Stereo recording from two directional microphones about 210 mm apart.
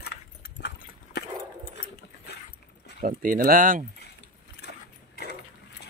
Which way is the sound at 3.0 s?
40° right (ahead or behind).